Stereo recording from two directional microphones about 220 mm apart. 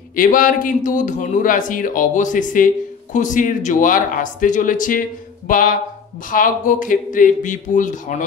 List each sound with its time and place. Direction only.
0.1 s speech: 40° left (ahead or behind)